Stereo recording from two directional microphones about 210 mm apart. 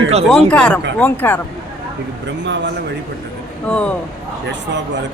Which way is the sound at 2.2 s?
55° right (ahead or behind).